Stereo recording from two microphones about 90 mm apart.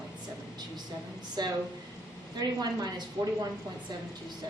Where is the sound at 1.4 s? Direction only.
50° right (ahead or behind).